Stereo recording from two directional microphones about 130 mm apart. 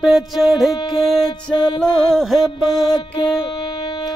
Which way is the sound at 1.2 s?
35° left (ahead or behind).